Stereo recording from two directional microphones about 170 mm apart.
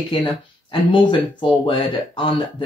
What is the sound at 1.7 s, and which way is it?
Speech, 30° left (ahead or behind).